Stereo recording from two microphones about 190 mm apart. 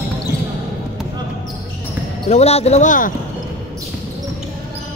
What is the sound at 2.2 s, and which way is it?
Speech, 35° left (ahead or behind).